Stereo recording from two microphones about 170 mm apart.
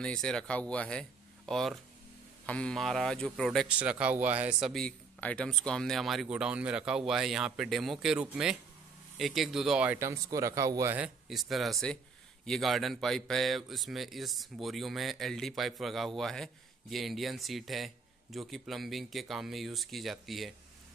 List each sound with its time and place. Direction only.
0.0 s speech: 5° left (ahead or behind)
9.9 s speech: 15° right (ahead or behind)
11.2 s speech: centre (ahead or behind)